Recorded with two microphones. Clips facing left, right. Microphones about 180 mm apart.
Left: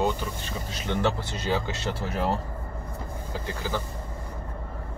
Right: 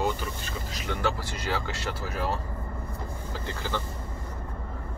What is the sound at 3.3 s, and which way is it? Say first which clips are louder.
Speech: left 3 dB; 10° left (ahead or behind).